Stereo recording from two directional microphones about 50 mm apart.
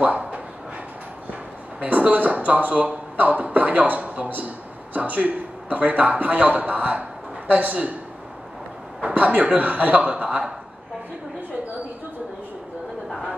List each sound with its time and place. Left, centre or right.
0.0 s a sound: right
1.8 s a man's voice: right
9.0 s a man's voice: right